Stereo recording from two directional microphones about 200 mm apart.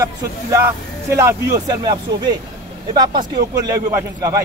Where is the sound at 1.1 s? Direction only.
15° right (ahead or behind).